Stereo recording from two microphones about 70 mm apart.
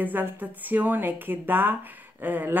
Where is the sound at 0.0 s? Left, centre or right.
Right.